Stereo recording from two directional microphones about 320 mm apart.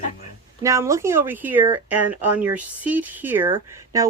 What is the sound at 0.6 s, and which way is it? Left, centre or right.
Speech, centre.